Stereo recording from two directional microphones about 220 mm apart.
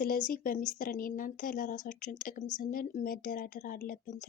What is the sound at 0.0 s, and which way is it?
A woman's voice, 40° left (ahead or behind).